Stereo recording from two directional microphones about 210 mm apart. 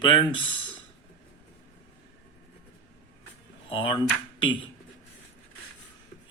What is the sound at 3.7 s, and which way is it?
Speech, 25° left (ahead or behind).